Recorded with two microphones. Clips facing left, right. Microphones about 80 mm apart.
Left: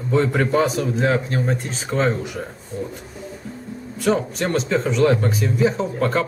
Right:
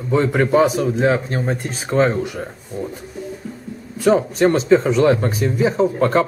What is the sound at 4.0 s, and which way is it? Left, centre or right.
A man's voice, centre.